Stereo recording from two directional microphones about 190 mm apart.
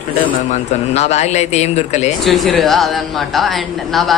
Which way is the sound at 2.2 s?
Centre (ahead or behind).